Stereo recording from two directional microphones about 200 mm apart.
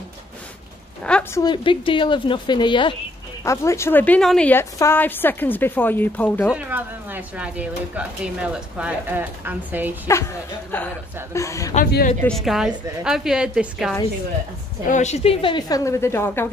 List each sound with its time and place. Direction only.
1.0 s speech: 5° left (ahead or behind)
1.4 s a woman's voice: 25° left (ahead or behind); by 6.5 s 10° left (ahead or behind)
6.5 s a woman's voice: 10° right (ahead or behind)
10.7 s a woman's voice: 10° left (ahead or behind)
11.7 s a man's voice: 45° left (ahead or behind)
12.2 s a woman's voice: centre (ahead or behind)
14.9 s a woman's voice: 35° left (ahead or behind); by 16.4 s 10° left (ahead or behind)